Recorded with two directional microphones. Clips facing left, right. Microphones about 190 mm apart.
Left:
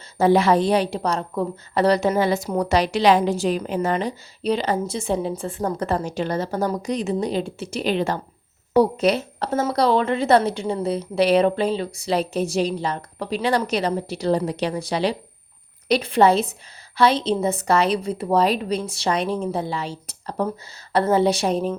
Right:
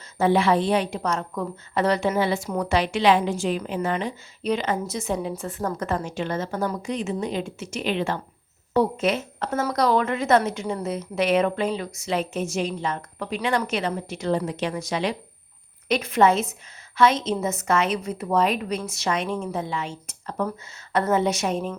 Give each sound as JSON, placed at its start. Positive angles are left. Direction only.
{"t": 0.2, "sound": "a woman's voice", "side_deg": 40}